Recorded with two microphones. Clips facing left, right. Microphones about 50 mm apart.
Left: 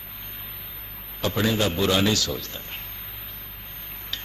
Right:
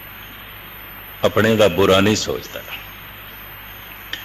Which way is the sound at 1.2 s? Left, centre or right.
Right.